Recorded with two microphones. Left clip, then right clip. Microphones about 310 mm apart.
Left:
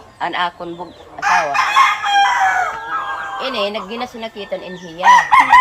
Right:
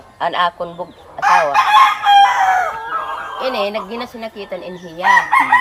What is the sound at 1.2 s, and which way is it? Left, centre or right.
Chicken, right.